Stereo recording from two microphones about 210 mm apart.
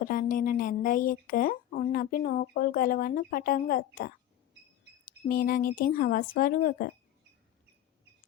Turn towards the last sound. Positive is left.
turn(degrees=45)  # may be behind; listen again after turning